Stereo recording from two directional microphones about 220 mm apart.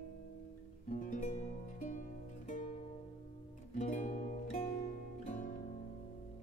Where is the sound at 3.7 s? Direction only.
35° left (ahead or behind).